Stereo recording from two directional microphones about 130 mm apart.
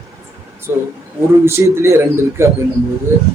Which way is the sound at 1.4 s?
20° right (ahead or behind).